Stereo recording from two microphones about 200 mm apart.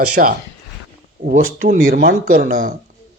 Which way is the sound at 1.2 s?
40° right (ahead or behind).